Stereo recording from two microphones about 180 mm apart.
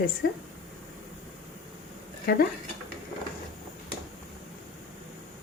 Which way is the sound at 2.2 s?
60° left (ahead or behind).